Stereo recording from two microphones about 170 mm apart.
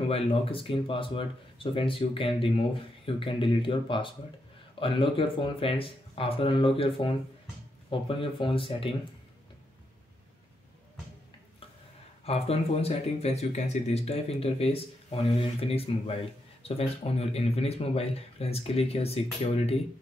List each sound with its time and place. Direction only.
0.1 s speech: 35° left (ahead or behind)
12.3 s speech: 35° left (ahead or behind)